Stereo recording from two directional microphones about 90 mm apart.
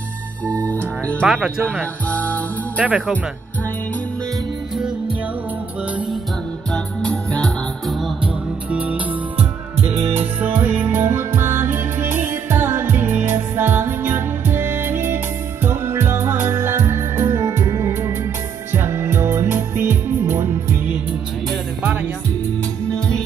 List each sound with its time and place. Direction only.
0.5 s music: 15° left (ahead or behind)
1.2 s speech: 10° right (ahead or behind)
2.0 s music: 15° left (ahead or behind)
2.8 s speech: 15° right (ahead or behind)
6.7 s music: 5° left (ahead or behind)
8.6 s music: 15° right (ahead or behind)
22.8 s music: 10° left (ahead or behind)